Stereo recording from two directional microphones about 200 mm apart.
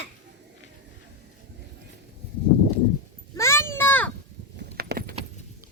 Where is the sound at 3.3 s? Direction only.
15° left (ahead or behind).